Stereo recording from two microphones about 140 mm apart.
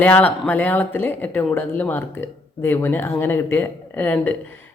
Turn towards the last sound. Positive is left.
turn(degrees=15)  # may be behind; listen again after turning